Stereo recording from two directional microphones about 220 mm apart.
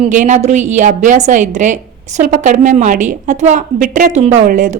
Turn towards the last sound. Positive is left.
turn(degrees=-35)  # may be behind; listen again after turning